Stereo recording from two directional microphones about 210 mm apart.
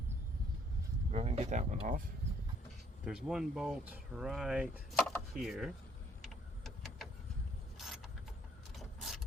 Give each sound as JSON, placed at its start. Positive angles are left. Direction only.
{"t": 1.1, "sound": "speech", "side_deg": -30}
{"t": 3.0, "sound": "speech", "side_deg": 0}
{"t": 7.8, "sound": "mechanisms", "side_deg": 0}
{"t": 8.7, "sound": "vehicle", "side_deg": 0}